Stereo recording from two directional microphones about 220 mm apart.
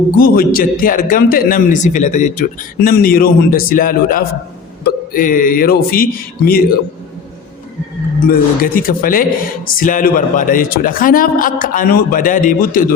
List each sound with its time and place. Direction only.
0.2 s a man's voice: 40° left (ahead or behind)
8.3 s a man's voice: 40° left (ahead or behind)